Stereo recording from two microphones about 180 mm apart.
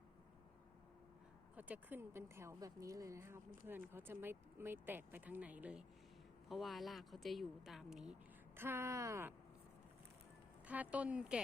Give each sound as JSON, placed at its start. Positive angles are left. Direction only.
{"t": 1.5, "sound": "speech", "side_deg": -10}
{"t": 10.7, "sound": "speech", "side_deg": -10}